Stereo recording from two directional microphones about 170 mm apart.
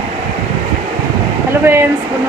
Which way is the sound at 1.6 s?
15° right (ahead or behind).